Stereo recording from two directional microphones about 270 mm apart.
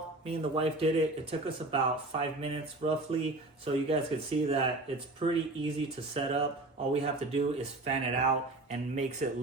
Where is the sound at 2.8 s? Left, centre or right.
Right.